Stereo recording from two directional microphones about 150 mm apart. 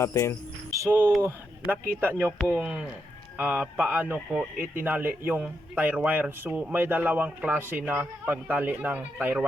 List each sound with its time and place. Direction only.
0.0 s cricket: 20° left (ahead or behind)
0.7 s a man's voice: 15° right (ahead or behind)
2.4 s speech: 5° left (ahead or behind)
3.3 s a man's voice: 10° right (ahead or behind)